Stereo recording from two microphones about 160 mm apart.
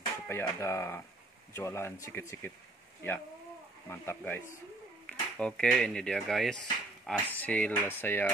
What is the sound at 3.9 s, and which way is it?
Speech, 15° left (ahead or behind).